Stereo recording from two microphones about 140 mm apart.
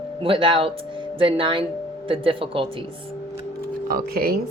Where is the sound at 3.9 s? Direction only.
90° right.